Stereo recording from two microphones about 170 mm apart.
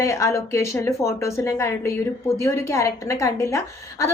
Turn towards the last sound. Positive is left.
turn(degrees=15)  # may be behind; listen again after turning